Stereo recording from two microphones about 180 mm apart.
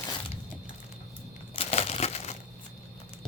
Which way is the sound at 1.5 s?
35° left (ahead or behind).